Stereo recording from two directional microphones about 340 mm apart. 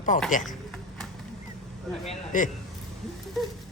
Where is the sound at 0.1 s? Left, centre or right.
Left.